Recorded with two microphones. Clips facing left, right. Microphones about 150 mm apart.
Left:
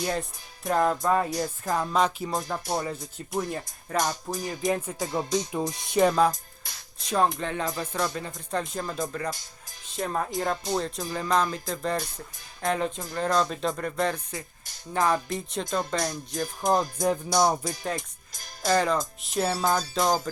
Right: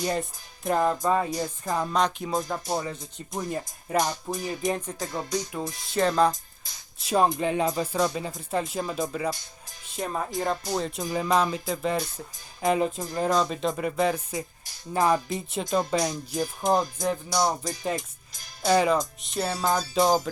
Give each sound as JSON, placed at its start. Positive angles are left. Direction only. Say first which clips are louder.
{"t": 0.0, "sound": "speech", "louder": "right 1 dB", "side_deg": 0}
{"t": 3.5, "sound": "speech", "louder": "right 3 dB", "side_deg": -15}
{"t": 4.3, "sound": "speech", "louder": "even", "side_deg": 0}
{"t": 5.1, "sound": "music", "louder": "left 3 dB", "side_deg": 20}
{"t": 7.1, "sound": "speech", "louder": "right 2 dB", "side_deg": -15}
{"t": 15.3, "sound": "speech", "louder": "right 2 dB", "side_deg": 0}
{"t": 17.0, "sound": "music", "louder": "left 2 dB", "side_deg": 20}
{"t": 17.6, "sound": "speech", "louder": "right 2 dB", "side_deg": 0}
{"t": 18.6, "sound": "speech", "louder": "right 2 dB", "side_deg": -10}
{"t": 19.2, "sound": "speech", "louder": "left 2 dB", "side_deg": 5}
{"t": 19.9, "sound": "speech", "louder": "right 3 dB", "side_deg": -10}